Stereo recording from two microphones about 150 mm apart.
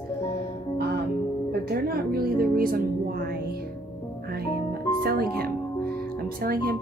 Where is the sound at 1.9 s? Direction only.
90° right.